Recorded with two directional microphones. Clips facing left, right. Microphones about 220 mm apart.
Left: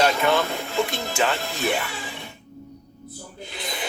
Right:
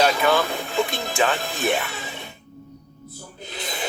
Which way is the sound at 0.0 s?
10° right (ahead or behind).